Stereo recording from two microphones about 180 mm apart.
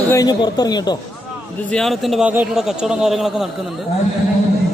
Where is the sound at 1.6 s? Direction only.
5° left (ahead or behind).